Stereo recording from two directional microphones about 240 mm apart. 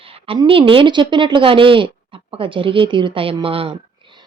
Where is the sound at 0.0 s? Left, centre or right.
Right.